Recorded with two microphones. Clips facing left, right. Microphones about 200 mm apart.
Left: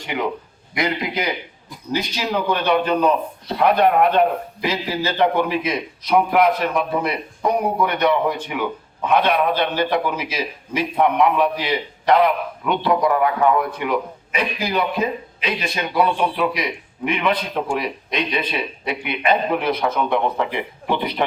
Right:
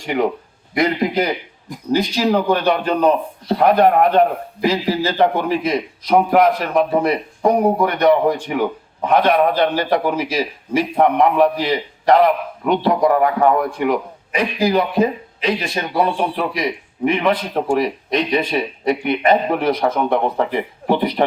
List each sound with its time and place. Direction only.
0.0 s a man's voice: 45° right (ahead or behind)